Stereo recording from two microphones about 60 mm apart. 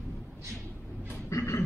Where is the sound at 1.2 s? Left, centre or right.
Left.